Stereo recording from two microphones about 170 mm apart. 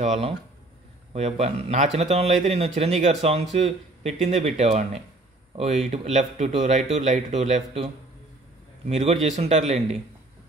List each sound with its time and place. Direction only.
0.0 s speech: 40° right (ahead or behind)
5.9 s speech: 40° right (ahead or behind)